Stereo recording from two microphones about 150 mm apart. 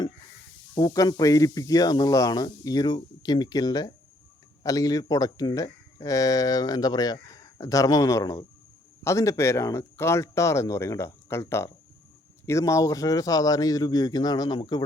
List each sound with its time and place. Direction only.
0.8 s speech: 25° left (ahead or behind)